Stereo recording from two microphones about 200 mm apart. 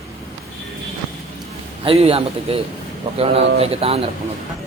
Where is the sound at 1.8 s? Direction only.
30° right (ahead or behind).